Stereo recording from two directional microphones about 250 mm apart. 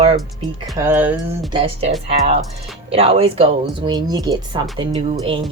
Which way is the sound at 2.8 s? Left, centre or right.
Right.